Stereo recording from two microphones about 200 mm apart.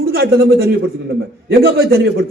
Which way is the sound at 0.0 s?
50° right (ahead or behind).